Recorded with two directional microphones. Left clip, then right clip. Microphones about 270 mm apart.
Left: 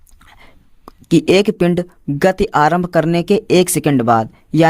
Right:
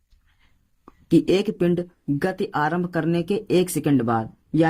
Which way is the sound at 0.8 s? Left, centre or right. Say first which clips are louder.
Left 6 dB; left.